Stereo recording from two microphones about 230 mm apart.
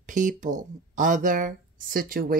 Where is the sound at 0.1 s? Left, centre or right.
Right.